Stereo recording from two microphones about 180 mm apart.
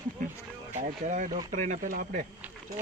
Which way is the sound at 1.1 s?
45° right (ahead or behind).